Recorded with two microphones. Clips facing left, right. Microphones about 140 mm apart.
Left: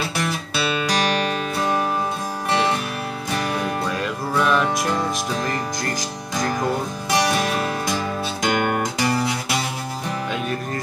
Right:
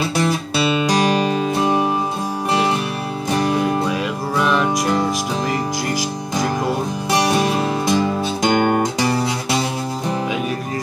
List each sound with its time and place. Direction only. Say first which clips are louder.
1.1 s music: right 5 dB; 20° right (ahead or behind)
3.3 s music: right 6 dB; 25° right (ahead or behind)
4.4 s music: right 1 dB; centre (ahead or behind)
7.2 s music: right 3 dB; 25° right (ahead or behind)